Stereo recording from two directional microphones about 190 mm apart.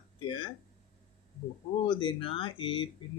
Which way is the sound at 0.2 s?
25° left (ahead or behind).